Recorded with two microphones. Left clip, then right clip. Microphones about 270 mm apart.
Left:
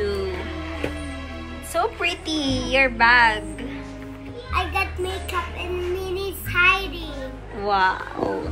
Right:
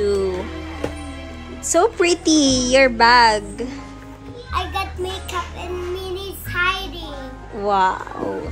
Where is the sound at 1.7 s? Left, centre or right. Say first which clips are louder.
Right 7 dB; right.